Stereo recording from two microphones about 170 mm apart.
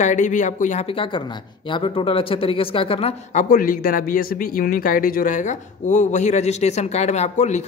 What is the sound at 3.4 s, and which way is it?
A man's voice, 55° left (ahead or behind).